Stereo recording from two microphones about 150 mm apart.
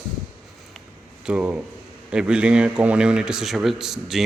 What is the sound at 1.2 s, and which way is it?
Speech, 10° right (ahead or behind).